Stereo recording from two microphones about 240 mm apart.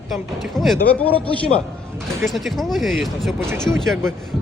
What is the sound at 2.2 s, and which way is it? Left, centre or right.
Speech, centre.